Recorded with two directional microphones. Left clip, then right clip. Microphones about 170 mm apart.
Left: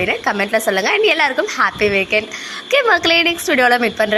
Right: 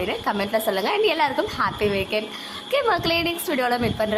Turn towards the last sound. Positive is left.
turn(degrees=20)  # may be behind; listen again after turning